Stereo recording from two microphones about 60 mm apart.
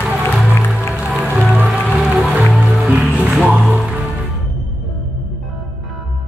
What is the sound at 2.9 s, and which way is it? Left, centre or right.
Music, right.